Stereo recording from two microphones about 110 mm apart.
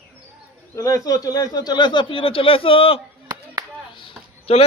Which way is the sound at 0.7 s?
30° left (ahead or behind).